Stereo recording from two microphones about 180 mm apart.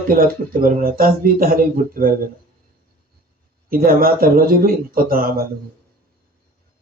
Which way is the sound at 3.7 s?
55° right (ahead or behind).